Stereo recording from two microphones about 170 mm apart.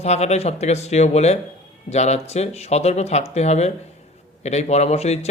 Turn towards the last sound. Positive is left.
turn(degrees=40)  # may be behind; listen again after turning